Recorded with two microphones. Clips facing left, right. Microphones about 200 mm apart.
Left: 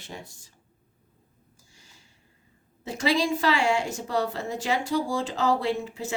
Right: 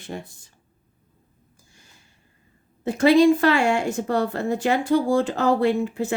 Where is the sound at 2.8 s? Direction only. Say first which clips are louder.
Right 10 dB; 55° right (ahead or behind).